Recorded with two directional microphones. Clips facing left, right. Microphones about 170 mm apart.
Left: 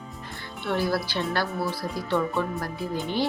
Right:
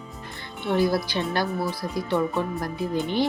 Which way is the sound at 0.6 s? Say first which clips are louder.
Right 4 dB; 15° right (ahead or behind).